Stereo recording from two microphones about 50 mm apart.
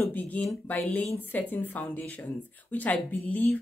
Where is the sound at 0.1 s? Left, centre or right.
Left.